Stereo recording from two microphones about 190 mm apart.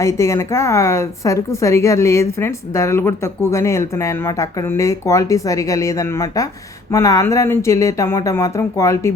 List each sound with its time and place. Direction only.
0.0 s a woman's voice: 15° left (ahead or behind)